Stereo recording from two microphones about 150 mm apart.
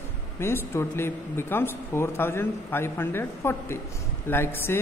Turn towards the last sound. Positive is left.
turn(degrees=15)  # may be behind; listen again after turning